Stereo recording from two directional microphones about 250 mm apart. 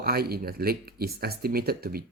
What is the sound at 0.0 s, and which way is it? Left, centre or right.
Speech, right.